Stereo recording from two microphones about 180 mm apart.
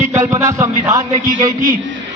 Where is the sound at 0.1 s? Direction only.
15° right (ahead or behind).